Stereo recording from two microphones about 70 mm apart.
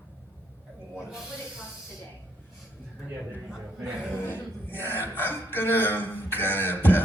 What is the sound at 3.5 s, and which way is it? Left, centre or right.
Speech, centre.